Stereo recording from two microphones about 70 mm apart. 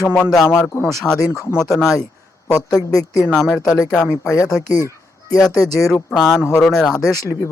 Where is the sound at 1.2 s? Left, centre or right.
Left.